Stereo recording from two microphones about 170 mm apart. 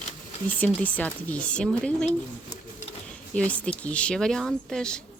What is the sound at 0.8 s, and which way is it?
Speech, 10° left (ahead or behind).